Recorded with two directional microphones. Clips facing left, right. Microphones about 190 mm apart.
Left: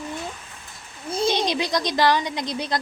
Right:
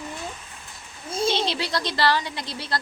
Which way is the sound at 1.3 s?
15° left (ahead or behind).